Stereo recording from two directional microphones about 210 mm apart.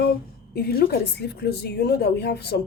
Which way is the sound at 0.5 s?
45° left (ahead or behind).